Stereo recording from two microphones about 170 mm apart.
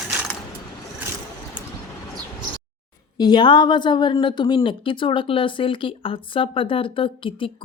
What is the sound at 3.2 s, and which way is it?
A woman's voice, 25° left (ahead or behind).